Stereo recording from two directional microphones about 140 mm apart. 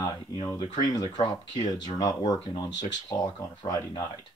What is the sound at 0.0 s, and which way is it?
Speech, 25° left (ahead or behind).